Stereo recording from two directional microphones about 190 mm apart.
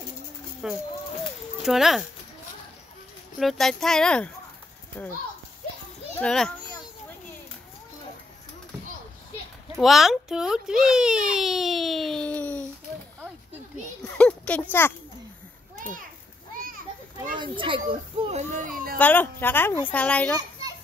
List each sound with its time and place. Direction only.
0.6 s speech: centre (ahead or behind)
3.3 s speech: centre (ahead or behind)
6.1 s a child's voice: 5° left (ahead or behind)
9.8 s speech: centre (ahead or behind)
14.0 s a sound: 5° left (ahead or behind)
17.4 s a child's voice: 25° right (ahead or behind)
18.5 s speech: 45° right (ahead or behind)
18.9 s speech: 10° left (ahead or behind)